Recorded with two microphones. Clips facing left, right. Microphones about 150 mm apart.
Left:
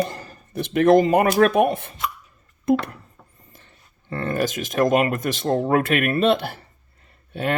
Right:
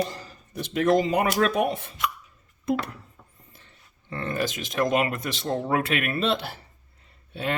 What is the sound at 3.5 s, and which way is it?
Speech, 50° left (ahead or behind).